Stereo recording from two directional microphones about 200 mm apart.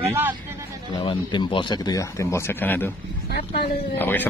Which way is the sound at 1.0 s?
25° left (ahead or behind).